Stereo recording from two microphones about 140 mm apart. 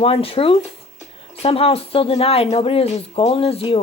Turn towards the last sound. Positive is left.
turn(degrees=40)  # may be behind; listen again after turning